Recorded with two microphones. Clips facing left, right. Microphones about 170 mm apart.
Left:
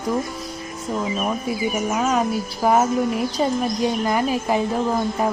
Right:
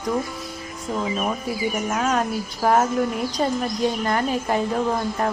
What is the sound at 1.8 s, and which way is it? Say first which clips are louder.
Speech: left 2 dB; centre (ahead or behind).